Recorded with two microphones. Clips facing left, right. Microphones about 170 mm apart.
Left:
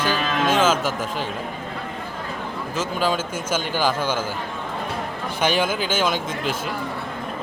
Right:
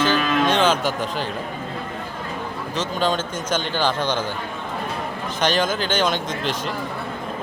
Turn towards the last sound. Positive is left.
turn(degrees=5)  # may be behind; listen again after turning